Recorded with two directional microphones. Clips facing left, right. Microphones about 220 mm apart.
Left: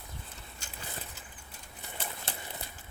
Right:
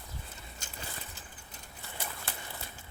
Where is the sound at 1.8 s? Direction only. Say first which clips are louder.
Left 1 dB; 20° left (ahead or behind).